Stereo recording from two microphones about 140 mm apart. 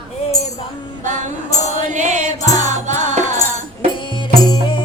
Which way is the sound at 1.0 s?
60° right (ahead or behind).